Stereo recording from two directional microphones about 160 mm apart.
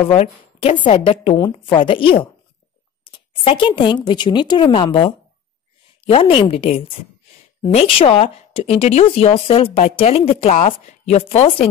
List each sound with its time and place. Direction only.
0.1 s speech: 40° left (ahead or behind)